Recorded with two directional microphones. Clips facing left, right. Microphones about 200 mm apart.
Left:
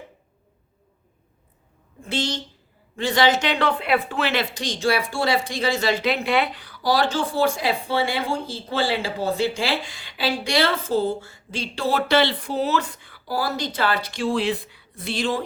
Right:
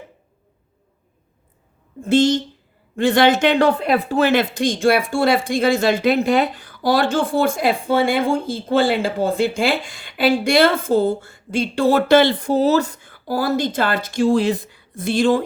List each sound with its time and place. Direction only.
2.0 s speech: 50° right (ahead or behind)